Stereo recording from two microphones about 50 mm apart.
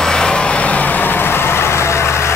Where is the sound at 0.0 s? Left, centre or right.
Centre.